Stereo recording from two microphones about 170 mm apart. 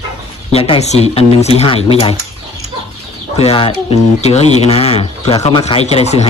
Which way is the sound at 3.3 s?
35° left (ahead or behind).